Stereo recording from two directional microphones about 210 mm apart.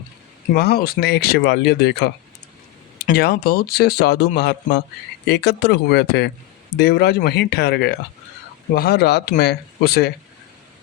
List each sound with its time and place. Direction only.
0.5 s speech: 50° left (ahead or behind)
3.2 s speech: 50° left (ahead or behind)